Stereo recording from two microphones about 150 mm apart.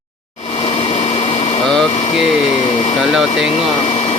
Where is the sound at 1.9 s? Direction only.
45° left (ahead or behind).